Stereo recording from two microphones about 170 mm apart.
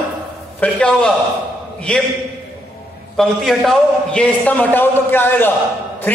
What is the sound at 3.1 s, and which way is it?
A man's voice, centre (ahead or behind).